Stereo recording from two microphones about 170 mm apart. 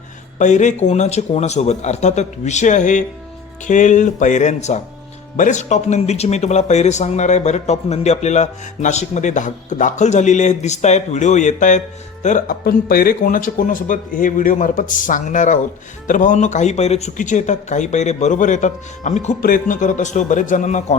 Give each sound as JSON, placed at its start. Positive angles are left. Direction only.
{"t": 0.3, "sound": "speech", "side_deg": 45}